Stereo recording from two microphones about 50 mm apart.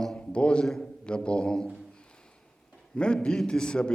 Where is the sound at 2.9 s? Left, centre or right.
Centre.